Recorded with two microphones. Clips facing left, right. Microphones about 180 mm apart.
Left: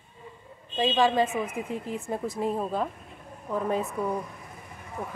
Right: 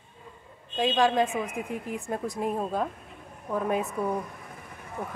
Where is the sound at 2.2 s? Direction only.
15° right (ahead or behind).